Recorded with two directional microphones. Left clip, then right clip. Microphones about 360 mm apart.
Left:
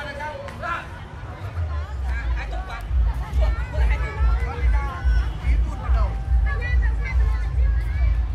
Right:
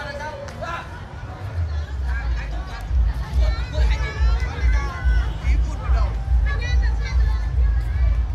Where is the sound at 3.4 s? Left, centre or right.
Centre.